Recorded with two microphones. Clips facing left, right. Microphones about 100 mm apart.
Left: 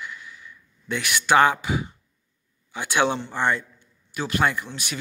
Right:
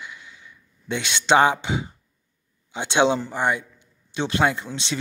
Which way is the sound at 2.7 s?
20° right (ahead or behind).